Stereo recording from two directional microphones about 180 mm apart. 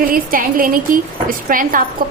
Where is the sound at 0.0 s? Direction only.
50° right (ahead or behind).